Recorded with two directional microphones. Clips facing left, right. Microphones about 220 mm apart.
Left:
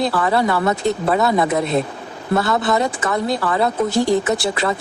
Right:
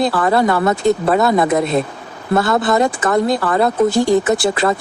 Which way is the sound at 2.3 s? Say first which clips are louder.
Right 3 dB; 50° right (ahead or behind).